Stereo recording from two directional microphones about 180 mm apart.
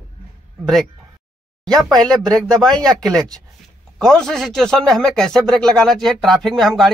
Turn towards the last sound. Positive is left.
turn(degrees=0)  # may be behind; listen again after turning